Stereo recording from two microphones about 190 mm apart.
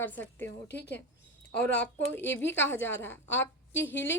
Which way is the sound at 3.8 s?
10° left (ahead or behind).